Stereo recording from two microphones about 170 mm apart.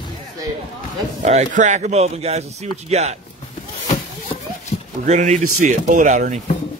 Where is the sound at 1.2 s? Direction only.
45° right (ahead or behind).